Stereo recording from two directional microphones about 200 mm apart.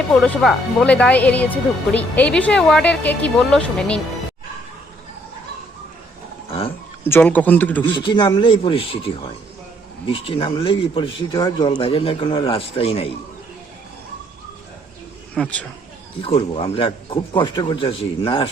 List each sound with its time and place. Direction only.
0.1 s speech: 5° left (ahead or behind)
7.0 s speech: 10° left (ahead or behind)
7.9 s a man's voice: 25° left (ahead or behind)
15.4 s speech: 5° left (ahead or behind)
16.2 s a man's voice: 30° left (ahead or behind)